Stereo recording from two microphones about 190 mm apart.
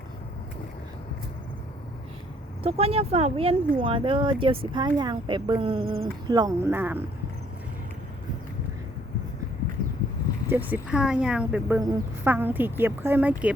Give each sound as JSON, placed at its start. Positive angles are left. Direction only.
{"t": 2.6, "sound": "speech", "side_deg": -30}
{"t": 10.5, "sound": "speech", "side_deg": -10}